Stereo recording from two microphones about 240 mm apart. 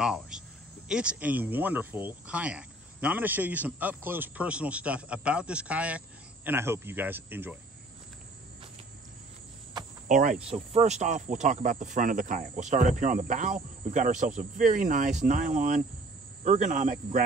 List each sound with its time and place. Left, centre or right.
0.0 s speech: centre
10.0 s speech: right